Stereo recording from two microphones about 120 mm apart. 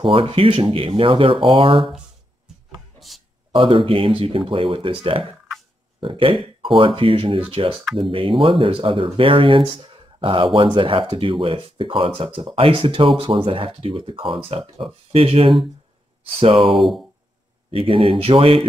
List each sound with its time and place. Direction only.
0.0 s speech: 45° right (ahead or behind)
3.5 s speech: 45° right (ahead or behind)
5.9 s speech: 45° right (ahead or behind)
16.6 s speech: centre (ahead or behind)
17.6 s speech: 50° right (ahead or behind)